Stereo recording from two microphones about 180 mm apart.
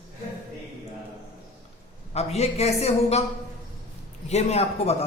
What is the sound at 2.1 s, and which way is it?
A man's voice, 35° left (ahead or behind).